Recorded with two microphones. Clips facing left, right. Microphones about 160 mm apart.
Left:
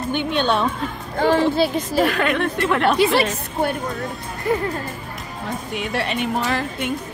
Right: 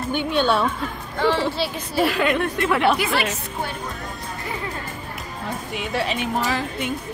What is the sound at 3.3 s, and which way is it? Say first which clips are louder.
Speech: left 6 dB; 55° left (ahead or behind).